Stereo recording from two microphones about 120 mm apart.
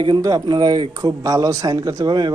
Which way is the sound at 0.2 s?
35° right (ahead or behind).